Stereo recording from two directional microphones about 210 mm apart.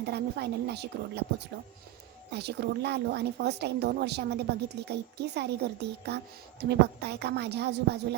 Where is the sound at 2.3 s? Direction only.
50° right (ahead or behind).